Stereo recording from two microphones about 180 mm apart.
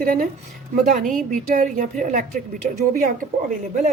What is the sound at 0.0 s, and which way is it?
A woman's voice, 50° right (ahead or behind).